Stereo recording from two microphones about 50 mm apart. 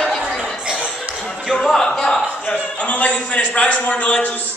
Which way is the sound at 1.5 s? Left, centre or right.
Centre.